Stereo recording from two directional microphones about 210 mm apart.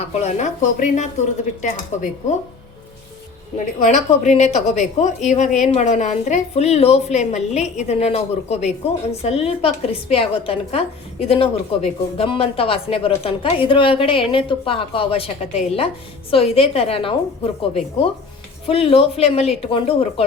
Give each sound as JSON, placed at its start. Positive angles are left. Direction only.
{"t": 0.1, "sound": "a woman's voice", "side_deg": 35}
{"t": 3.8, "sound": "a woman's voice", "side_deg": 35}